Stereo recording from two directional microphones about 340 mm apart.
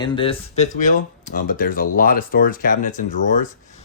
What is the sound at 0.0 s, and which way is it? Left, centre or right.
Speech, centre.